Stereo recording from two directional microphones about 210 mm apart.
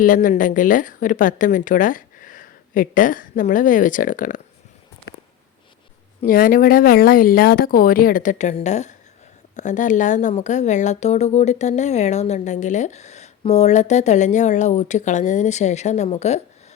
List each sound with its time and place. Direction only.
0.0 s a woman's voice: 40° left (ahead or behind)
6.2 s a woman's voice: 40° left (ahead or behind)